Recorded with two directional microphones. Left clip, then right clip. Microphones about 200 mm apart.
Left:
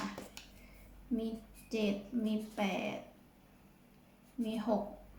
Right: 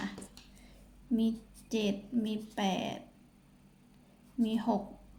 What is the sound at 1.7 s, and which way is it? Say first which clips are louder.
A woman's voice: right 2 dB; 50° right (ahead or behind).